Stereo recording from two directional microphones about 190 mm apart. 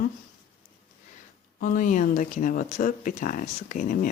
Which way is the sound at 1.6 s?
45° left (ahead or behind).